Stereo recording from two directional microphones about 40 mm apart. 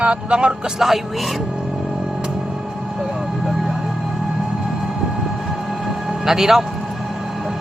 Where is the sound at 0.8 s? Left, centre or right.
Centre.